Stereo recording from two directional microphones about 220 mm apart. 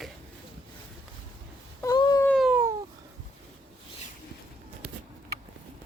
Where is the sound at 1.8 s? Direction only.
20° left (ahead or behind).